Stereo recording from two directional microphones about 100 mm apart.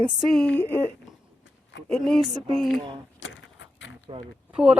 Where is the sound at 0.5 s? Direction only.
20° left (ahead or behind).